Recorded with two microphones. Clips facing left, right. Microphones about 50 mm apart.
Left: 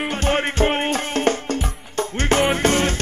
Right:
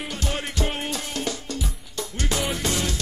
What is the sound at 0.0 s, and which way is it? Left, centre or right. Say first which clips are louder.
Music: left 9 dB; left.